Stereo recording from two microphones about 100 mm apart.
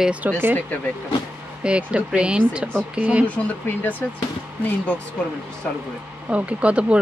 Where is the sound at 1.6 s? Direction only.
10° right (ahead or behind).